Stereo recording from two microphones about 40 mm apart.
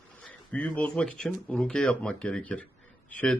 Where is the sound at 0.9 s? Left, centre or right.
Left.